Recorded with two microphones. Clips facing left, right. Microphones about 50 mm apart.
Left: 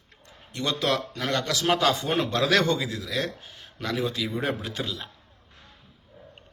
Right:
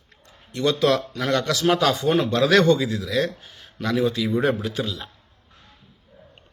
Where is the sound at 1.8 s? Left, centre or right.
Left.